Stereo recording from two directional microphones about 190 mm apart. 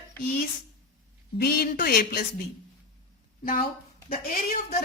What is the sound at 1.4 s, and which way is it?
Speech, 55° left (ahead or behind).